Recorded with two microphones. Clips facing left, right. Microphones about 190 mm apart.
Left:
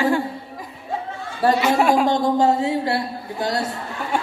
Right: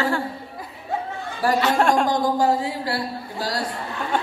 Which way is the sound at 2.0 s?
25° left (ahead or behind).